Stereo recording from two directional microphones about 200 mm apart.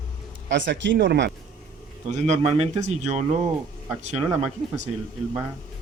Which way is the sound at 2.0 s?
35° right (ahead or behind).